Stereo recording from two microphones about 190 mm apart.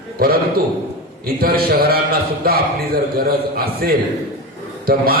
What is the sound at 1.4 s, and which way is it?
A man's voice, 50° right (ahead or behind).